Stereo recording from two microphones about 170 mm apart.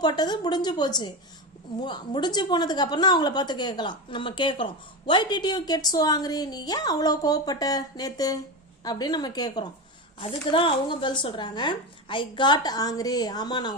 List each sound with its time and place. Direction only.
0.0 s a woman's voice: 25° left (ahead or behind)